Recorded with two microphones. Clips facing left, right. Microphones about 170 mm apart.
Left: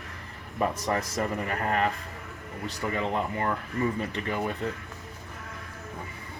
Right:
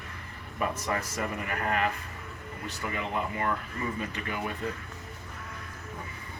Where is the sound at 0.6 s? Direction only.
30° left (ahead or behind).